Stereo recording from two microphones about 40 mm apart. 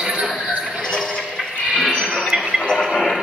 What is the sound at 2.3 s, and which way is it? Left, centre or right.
Music, right.